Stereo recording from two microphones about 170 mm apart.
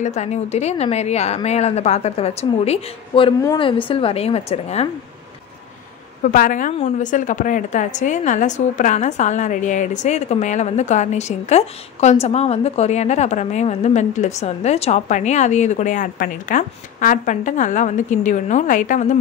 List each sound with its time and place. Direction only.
0.0 s a woman's voice: 40° left (ahead or behind)
6.2 s a woman's voice: 50° left (ahead or behind)